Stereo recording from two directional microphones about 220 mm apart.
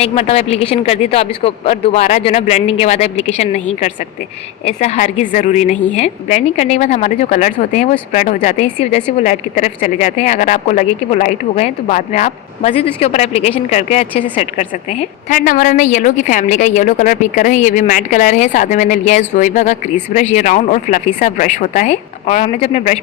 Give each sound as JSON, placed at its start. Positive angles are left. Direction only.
{"t": 0.0, "sound": "speech", "side_deg": 25}